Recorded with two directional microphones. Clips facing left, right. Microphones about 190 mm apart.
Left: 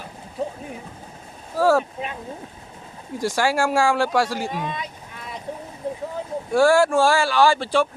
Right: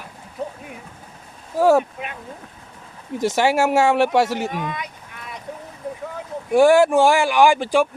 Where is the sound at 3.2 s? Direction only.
20° right (ahead or behind).